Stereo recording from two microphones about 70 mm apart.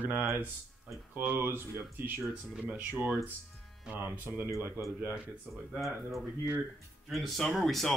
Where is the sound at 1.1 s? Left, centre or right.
Right.